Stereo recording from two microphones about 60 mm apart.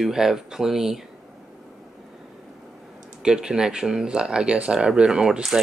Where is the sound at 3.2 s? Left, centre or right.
Centre.